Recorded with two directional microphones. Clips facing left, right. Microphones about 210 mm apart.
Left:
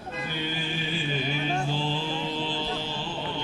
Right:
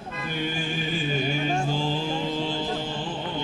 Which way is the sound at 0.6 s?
45° right (ahead or behind).